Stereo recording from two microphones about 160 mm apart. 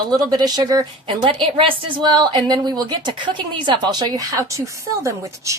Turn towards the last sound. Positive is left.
turn(degrees=-20)  # may be behind; listen again after turning